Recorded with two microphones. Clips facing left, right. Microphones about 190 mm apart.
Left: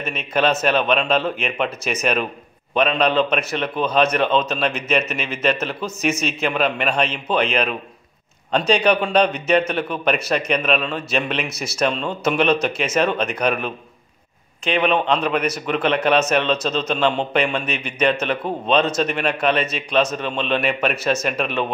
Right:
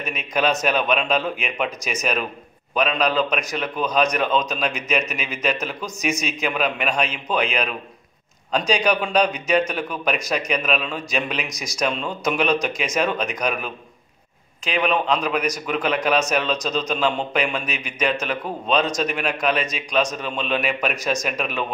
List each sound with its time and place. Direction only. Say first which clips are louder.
0.0 s speech: left 2 dB; 15° right (ahead or behind)